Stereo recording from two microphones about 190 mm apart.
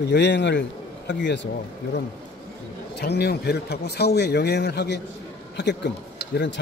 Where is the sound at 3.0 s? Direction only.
60° left (ahead or behind).